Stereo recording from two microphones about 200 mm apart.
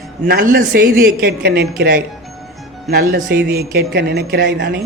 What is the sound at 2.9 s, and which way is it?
Speech, 50° right (ahead or behind).